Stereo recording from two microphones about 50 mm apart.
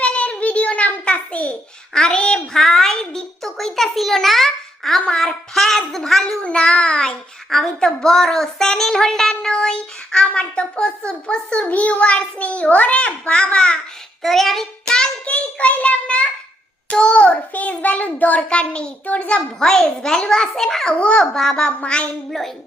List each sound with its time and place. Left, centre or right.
0.0 s a sound: left
1.9 s a child's voice: centre
2.6 s a woman's voice: centre
3.4 s a child's voice: centre
6.4 s a child's voice: left
14.2 s child singing: centre
14.9 s child singing: centre
15.3 s a child's voice: left
19.5 s a woman's voice: centre
21.0 s a child's voice: left
21.3 s a woman's voice: centre